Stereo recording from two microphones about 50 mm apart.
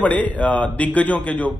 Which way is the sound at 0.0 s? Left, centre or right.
Left.